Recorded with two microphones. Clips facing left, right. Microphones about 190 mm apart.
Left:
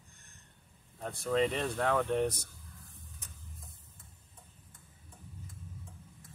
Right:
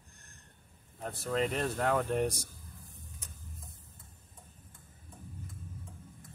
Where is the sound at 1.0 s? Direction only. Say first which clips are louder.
Left 2 dB; 5° right (ahead or behind).